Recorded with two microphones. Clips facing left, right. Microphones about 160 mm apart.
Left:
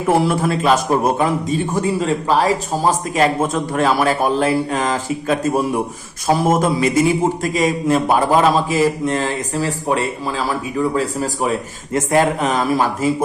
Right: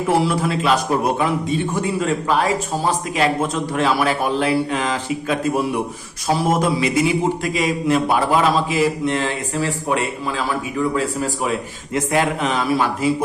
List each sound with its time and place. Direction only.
0.1 s a man's voice: 50° left (ahead or behind)